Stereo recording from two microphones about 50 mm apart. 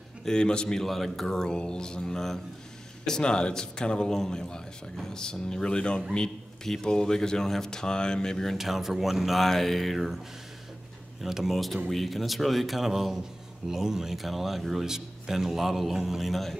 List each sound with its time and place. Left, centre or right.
0.2 s a man's voice: centre
8.5 s a man's voice: centre